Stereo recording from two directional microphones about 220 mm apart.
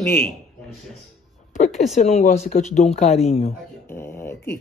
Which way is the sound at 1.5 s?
35° left (ahead or behind).